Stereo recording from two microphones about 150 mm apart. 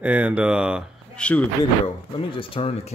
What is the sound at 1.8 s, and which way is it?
Speech, 35° left (ahead or behind).